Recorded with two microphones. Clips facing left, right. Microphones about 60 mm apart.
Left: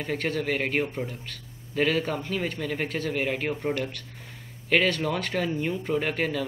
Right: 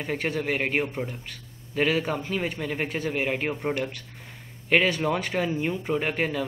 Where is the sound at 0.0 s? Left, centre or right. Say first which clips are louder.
Even; centre.